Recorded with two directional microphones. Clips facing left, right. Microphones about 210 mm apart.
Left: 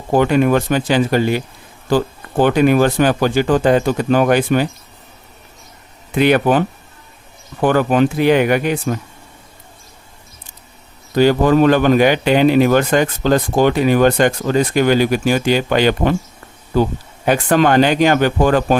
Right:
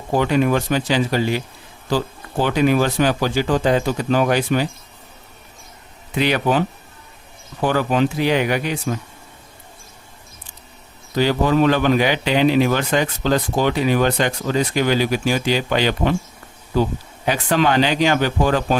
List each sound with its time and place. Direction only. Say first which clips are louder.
0.1 s speech: left 4 dB; 55° left (ahead or behind)
6.1 s speech: left 5 dB; 55° left (ahead or behind)
11.1 s speech: left 5 dB; 50° left (ahead or behind)
17.2 s speech: left 5 dB; 50° left (ahead or behind)